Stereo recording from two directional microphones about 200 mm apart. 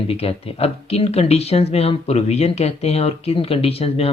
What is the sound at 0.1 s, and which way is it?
Speech, 30° left (ahead or behind).